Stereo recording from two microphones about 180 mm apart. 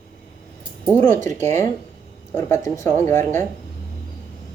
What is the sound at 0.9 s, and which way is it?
Speech, 10° left (ahead or behind).